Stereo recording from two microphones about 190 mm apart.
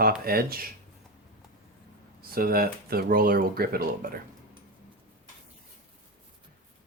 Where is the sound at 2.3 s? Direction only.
50° right (ahead or behind).